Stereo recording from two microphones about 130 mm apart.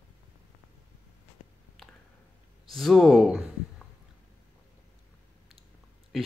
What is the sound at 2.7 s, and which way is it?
Speech, centre (ahead or behind).